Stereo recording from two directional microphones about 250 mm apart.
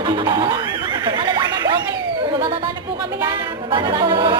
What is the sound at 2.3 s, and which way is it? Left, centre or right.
Chatter, centre.